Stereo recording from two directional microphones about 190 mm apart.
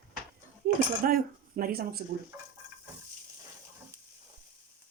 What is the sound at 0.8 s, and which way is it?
Speech, 50° right (ahead or behind).